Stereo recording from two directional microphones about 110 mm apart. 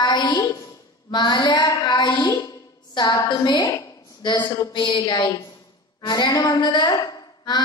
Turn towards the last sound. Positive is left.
turn(degrees=40)  # may be behind; listen again after turning